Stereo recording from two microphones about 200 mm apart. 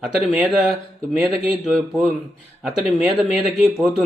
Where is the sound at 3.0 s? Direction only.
Centre (ahead or behind).